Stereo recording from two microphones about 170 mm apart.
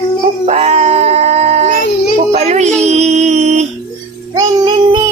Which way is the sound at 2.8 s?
40° right (ahead or behind).